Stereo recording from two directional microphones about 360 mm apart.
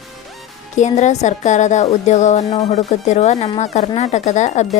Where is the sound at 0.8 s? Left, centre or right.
Centre.